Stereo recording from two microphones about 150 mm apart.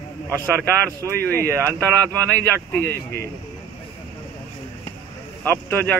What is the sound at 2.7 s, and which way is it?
Speech, 15° left (ahead or behind).